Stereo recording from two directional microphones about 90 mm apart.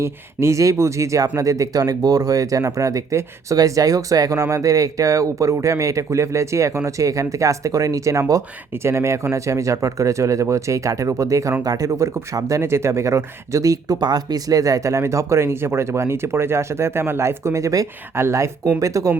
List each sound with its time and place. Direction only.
0.0 s speech: 30° right (ahead or behind)